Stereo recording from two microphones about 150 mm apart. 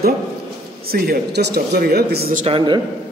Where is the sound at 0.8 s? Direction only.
90° right.